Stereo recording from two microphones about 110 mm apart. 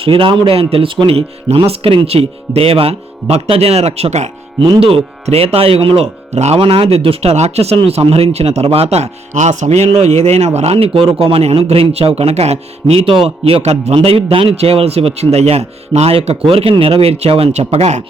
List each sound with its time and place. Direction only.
0.0 s speech: 55° right (ahead or behind); by 4.3 s 80° right
4.8 s speech: 55° right (ahead or behind); by 6.6 s 80° right
6.6 s speech: 60° right (ahead or behind)
7.8 s speech: 60° right (ahead or behind); by 13.9 s 75° right (ahead or behind)
13.9 s speech: 60° right (ahead or behind); by 18.0 s 80° right